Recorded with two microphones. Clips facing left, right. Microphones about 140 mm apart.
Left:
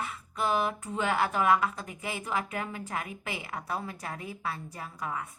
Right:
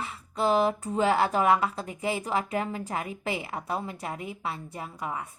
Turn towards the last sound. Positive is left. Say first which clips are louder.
# right 2 dB
turn(degrees=-25)  # may be behind; listen again after turning